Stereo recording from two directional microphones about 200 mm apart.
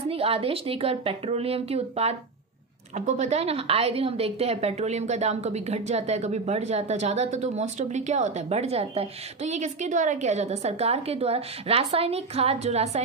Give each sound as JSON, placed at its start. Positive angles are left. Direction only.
{"t": 0.1, "sound": "a woman's voice", "side_deg": -30}